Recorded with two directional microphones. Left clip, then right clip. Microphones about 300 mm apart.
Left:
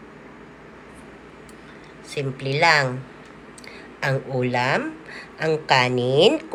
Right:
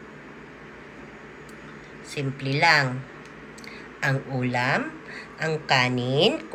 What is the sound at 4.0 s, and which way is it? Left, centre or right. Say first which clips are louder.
A man's voice: left 3 dB; centre.